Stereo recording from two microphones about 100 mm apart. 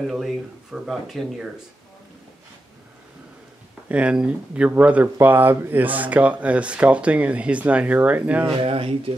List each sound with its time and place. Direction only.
0.0 s speech: centre (ahead or behind)
3.9 s speech: 10° right (ahead or behind)
8.5 s speech: 65° right (ahead or behind)